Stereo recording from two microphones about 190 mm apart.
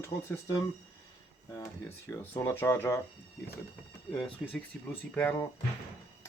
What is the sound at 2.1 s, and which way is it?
Speech, 15° left (ahead or behind).